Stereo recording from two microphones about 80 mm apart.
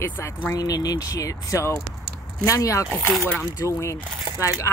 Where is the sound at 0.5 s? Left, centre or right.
Left.